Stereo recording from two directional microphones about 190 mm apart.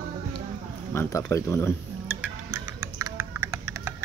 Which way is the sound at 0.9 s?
10° left (ahead or behind).